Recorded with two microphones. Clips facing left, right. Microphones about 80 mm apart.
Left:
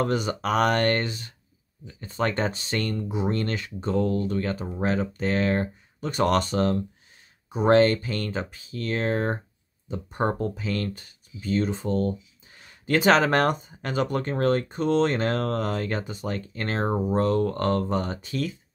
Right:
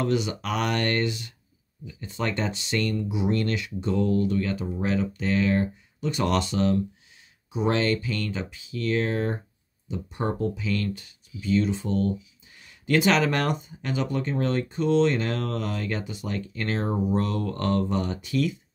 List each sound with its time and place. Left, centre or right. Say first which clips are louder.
0.0 s speech: left 1 dB; left